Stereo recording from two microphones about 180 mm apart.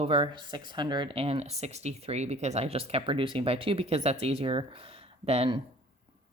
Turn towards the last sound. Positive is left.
turn(degrees=-35)  # may be behind; listen again after turning